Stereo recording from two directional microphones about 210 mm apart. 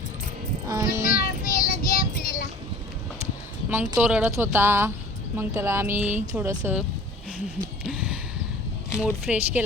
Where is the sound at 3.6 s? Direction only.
10° right (ahead or behind).